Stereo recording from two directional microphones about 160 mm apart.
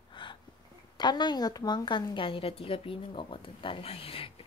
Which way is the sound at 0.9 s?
25° left (ahead or behind).